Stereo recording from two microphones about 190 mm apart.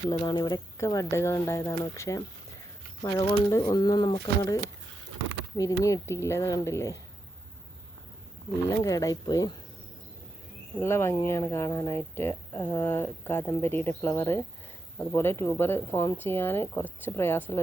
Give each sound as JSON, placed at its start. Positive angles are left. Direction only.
{"t": 0.1, "sound": "speech", "side_deg": 25}
{"t": 5.8, "sound": "speech", "side_deg": 15}
{"t": 8.8, "sound": "speech", "side_deg": 15}
{"t": 10.8, "sound": "speech", "side_deg": 15}